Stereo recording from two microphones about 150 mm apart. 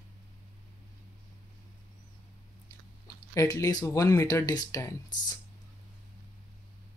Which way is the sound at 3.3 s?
20° left (ahead or behind).